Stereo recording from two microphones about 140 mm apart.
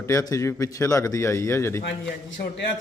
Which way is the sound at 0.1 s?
25° left (ahead or behind).